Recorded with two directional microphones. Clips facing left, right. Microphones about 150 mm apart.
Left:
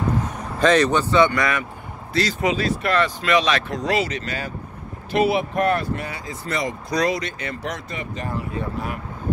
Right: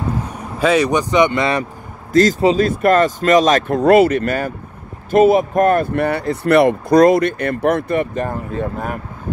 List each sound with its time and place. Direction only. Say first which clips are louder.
0.3 s speech: right 2 dB; 10° right (ahead or behind); by 1.6 s 25° right (ahead or behind)
2.1 s speech: right 9 dB; 45° right (ahead or behind)